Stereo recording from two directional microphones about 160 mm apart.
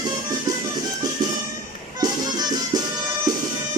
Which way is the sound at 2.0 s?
25° right (ahead or behind).